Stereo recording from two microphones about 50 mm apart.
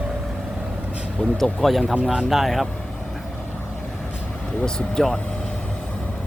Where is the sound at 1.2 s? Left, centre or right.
Left.